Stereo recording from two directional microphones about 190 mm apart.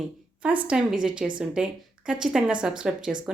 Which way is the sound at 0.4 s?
5° right (ahead or behind).